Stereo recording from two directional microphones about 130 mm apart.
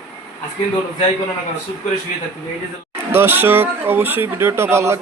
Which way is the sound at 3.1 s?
15° right (ahead or behind).